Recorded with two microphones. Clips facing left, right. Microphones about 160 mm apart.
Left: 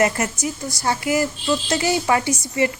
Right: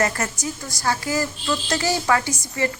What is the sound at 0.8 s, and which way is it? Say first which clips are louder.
A woman's voice: left 3 dB; 20° left (ahead or behind).